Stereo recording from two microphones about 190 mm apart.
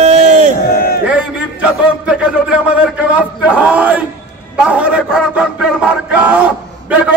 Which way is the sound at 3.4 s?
5° right (ahead or behind).